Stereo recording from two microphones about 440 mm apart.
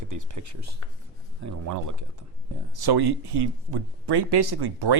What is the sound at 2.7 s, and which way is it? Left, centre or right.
Speech, right.